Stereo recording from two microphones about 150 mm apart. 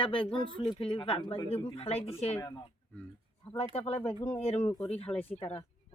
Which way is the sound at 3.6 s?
45° left (ahead or behind).